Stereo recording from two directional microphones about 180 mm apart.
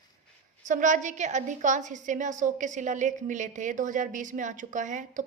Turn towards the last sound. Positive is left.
turn(degrees=-45)  # may be behind; listen again after turning